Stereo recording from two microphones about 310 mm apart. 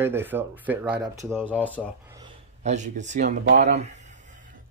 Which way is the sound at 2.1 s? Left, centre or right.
Centre.